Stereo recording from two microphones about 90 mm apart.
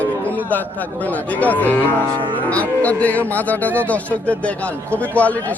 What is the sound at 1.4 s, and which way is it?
Speech, 15° left (ahead or behind).